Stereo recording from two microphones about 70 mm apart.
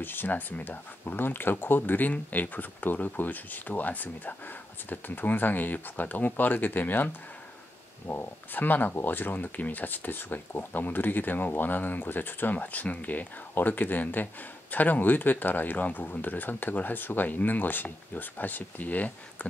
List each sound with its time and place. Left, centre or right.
0.0 s speech: left